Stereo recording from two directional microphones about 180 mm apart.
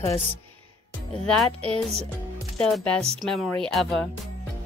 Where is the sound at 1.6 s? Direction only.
35° right (ahead or behind).